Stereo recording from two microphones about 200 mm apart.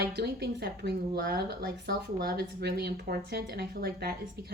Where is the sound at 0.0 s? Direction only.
55° right (ahead or behind).